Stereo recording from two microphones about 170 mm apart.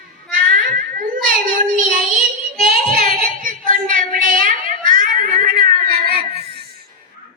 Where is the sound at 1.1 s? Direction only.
50° right (ahead or behind).